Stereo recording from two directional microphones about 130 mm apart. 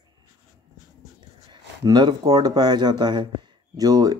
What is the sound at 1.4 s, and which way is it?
Speech, 35° right (ahead or behind).